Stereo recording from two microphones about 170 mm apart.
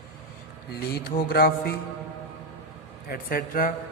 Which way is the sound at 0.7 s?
65° left (ahead or behind).